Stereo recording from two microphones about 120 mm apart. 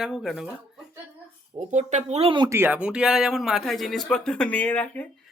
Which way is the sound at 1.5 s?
75° right (ahead or behind).